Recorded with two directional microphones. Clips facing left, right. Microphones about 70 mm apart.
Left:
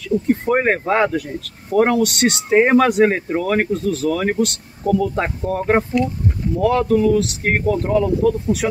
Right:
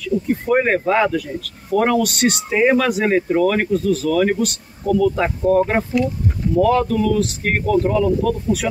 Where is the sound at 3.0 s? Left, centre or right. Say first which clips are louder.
Even; left.